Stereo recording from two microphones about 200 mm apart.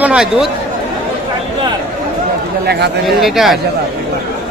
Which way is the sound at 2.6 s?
55° right (ahead or behind).